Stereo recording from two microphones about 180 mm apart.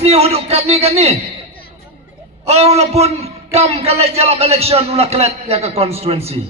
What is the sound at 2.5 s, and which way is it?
A man's voice, 35° right (ahead or behind).